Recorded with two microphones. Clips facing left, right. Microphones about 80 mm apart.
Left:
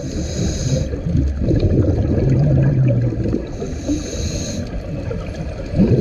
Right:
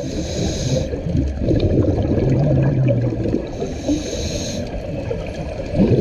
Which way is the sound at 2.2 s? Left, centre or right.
Centre.